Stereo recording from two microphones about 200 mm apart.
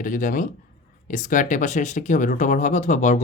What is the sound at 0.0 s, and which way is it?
Speech, 40° left (ahead or behind).